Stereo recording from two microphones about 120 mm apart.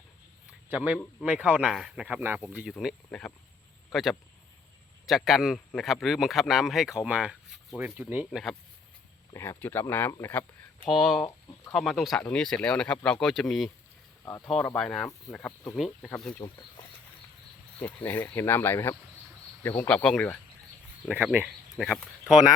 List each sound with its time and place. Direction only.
0.7 s speech: 10° right (ahead or behind)
1.7 s speech: centre (ahead or behind)
2.0 s speech: 15° right (ahead or behind)
2.6 s speech: centre (ahead or behind)
8.3 s speech: centre (ahead or behind)
9.3 s speech: 20° left (ahead or behind)
10.8 s speech: centre (ahead or behind)
16.4 s speech: 40° left (ahead or behind)
17.7 s speech: 15° left (ahead or behind)
21.1 s speech: 15° right (ahead or behind)
21.8 s speech: centre (ahead or behind)